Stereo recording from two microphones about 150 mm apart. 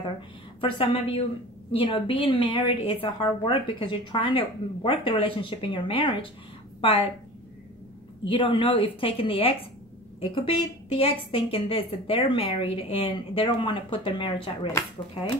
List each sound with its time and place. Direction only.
0.6 s a woman's voice: 35° left (ahead or behind)
8.3 s a woman's voice: 35° left (ahead or behind)